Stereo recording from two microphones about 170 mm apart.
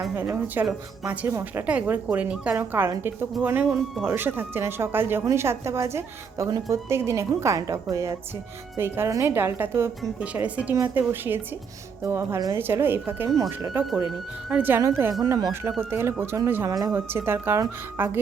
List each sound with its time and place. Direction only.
0.3 s speech: 10° right (ahead or behind)